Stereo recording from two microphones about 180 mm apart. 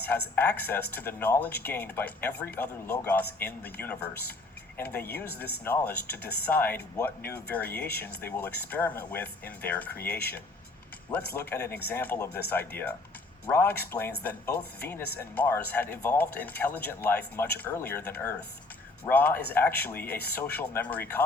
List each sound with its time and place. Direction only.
0.1 s speech: 10° left (ahead or behind)
11.3 s speech: 10° left (ahead or behind)